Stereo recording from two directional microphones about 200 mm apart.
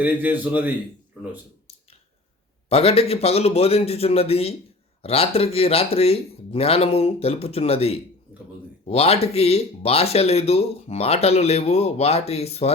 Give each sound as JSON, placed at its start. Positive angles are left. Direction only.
{"t": 0.0, "sound": "speech", "side_deg": -10}
{"t": 2.6, "sound": "speech", "side_deg": 30}